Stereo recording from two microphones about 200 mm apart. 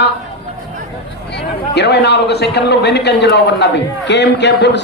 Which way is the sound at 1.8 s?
55° left (ahead or behind).